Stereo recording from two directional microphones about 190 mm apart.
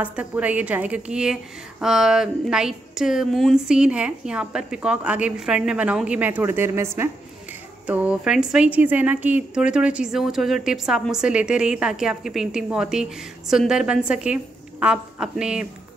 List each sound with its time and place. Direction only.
0.0 s a woman's voice: 5° right (ahead or behind)